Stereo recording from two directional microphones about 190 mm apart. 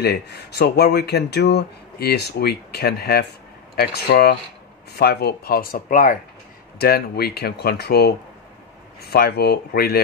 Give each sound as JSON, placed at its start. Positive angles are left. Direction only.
{"t": 0.0, "sound": "speech", "side_deg": 60}